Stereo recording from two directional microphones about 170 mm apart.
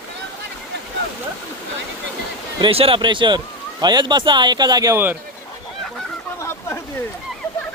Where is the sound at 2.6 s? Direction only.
30° right (ahead or behind); by 5.1 s 15° right (ahead or behind).